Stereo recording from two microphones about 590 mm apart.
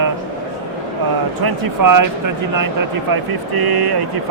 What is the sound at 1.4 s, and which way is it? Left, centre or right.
Speech, right.